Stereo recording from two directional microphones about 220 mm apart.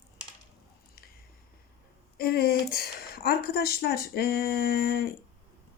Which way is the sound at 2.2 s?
45° left (ahead or behind).